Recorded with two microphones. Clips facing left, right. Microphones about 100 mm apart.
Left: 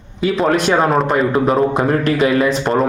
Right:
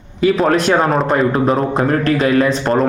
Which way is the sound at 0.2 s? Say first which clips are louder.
Right 2 dB; centre (ahead or behind).